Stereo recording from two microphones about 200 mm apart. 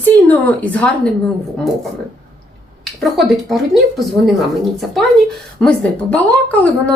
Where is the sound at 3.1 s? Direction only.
Centre (ahead or behind).